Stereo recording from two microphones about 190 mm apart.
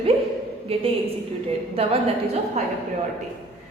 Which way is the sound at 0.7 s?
30° right (ahead or behind).